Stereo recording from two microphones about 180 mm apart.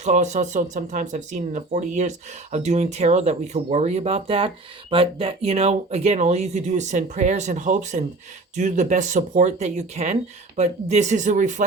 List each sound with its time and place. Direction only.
0.0 s speech: 40° right (ahead or behind)